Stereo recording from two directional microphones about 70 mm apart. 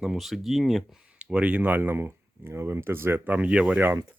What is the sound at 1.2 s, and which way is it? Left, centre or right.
Speech, centre.